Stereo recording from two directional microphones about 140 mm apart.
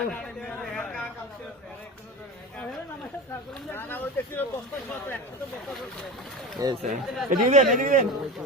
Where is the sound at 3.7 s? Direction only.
15° left (ahead or behind).